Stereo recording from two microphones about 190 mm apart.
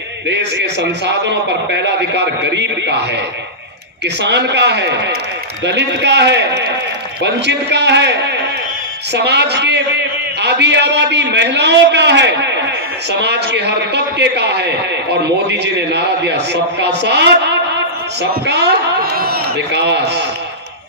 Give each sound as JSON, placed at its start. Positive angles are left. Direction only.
{"t": 0.3, "sound": "a man's voice", "side_deg": -65}